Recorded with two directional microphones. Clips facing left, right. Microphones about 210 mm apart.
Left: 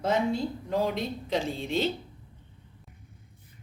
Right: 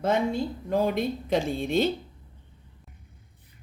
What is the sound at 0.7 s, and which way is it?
A woman's voice, 50° right (ahead or behind).